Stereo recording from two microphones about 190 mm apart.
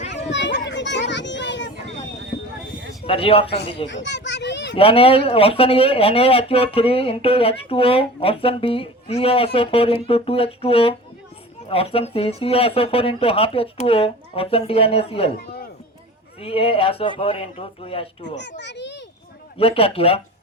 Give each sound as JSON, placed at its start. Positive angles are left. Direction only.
{"t": 0.3, "sound": "children playing", "side_deg": 70}
{"t": 3.1, "sound": "speech", "side_deg": 30}
{"t": 3.8, "sound": "children playing", "side_deg": 70}
{"t": 4.8, "sound": "speech", "side_deg": 30}
{"t": 16.4, "sound": "speech", "side_deg": 30}
{"t": 18.3, "sound": "a child's voice", "side_deg": 65}
{"t": 19.5, "sound": "speech", "side_deg": 30}